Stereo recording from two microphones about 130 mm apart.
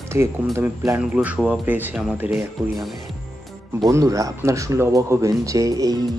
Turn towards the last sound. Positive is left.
turn(degrees=-30)  # may be behind; listen again after turning